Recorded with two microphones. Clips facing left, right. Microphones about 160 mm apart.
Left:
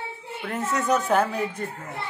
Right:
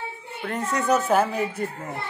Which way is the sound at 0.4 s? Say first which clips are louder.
Right 1 dB; 5° left (ahead or behind).